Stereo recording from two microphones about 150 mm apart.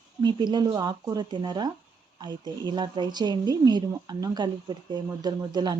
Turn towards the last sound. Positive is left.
turn(degrees=-30)  # may be behind; listen again after turning